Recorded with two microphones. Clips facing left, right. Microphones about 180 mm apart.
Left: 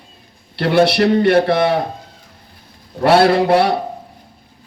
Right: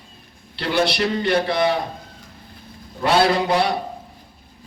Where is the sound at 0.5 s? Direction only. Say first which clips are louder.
Left 7 dB; 60° left (ahead or behind).